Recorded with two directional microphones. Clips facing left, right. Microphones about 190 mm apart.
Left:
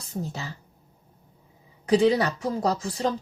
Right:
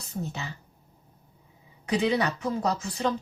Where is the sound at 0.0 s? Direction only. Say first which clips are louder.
Left 1 dB; 35° left (ahead or behind).